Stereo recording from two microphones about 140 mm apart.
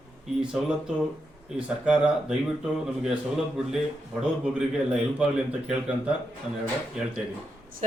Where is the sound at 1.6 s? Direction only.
5° right (ahead or behind).